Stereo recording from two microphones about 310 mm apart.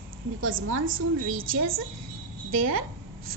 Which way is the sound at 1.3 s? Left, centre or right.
Right.